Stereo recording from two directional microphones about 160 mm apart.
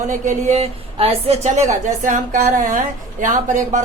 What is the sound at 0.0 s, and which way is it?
A woman's voice, 50° right (ahead or behind).